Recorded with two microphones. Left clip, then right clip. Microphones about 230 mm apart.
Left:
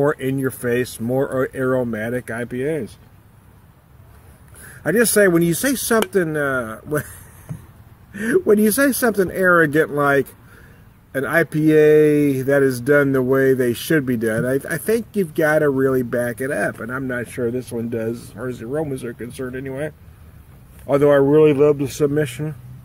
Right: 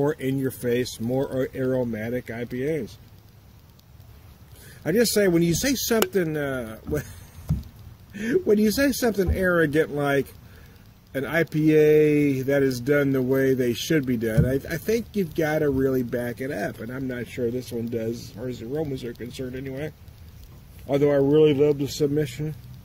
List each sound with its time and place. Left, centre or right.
0.0 s speech: centre
2.6 s speech: left
4.8 s speech: centre
8.1 s a man's voice: centre
19.0 s speech: left
20.8 s a man's voice: centre